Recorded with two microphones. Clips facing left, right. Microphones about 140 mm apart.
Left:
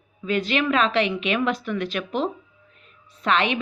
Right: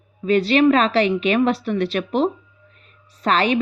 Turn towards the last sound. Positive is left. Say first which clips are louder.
# right 3 dB
turn(degrees=-40)  # may be behind; listen again after turning